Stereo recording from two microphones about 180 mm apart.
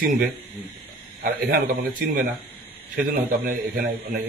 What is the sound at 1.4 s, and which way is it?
Speech, 50° right (ahead or behind).